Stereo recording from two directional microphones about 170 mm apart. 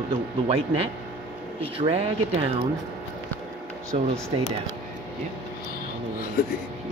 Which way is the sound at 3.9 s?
40° right (ahead or behind).